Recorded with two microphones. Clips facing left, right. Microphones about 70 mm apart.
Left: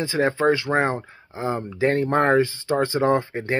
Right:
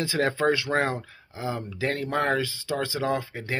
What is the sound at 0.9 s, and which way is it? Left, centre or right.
Speech, left.